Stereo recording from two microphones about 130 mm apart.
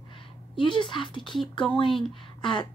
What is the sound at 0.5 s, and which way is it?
Speech, 40° left (ahead or behind).